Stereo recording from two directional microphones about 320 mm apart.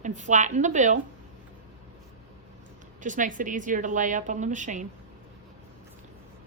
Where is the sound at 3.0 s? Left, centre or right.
Right.